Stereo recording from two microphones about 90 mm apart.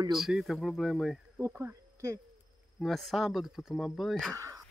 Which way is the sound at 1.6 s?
30° right (ahead or behind).